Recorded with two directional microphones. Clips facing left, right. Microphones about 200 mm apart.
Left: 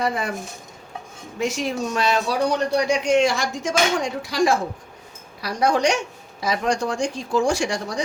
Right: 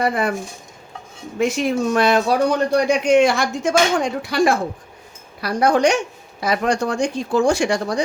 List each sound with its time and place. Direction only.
0.0 s speech: 60° right (ahead or behind)
1.4 s speech: 55° right (ahead or behind)